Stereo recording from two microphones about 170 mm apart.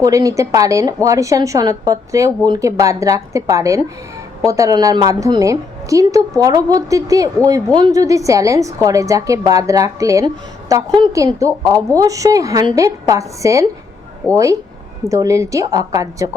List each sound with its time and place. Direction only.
0.0 s a woman's voice: 20° right (ahead or behind)